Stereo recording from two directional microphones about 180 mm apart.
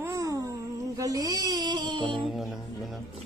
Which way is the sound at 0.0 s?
15° right (ahead or behind).